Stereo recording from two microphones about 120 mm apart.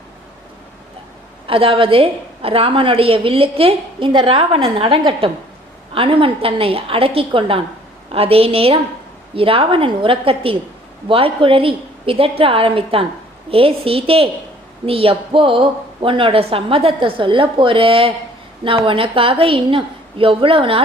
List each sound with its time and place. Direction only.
1.5 s a woman's voice: 50° right (ahead or behind)